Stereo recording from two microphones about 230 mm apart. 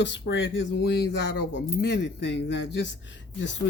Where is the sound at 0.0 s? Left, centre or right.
Left.